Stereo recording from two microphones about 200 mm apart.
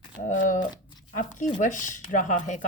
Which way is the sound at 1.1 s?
40° left (ahead or behind).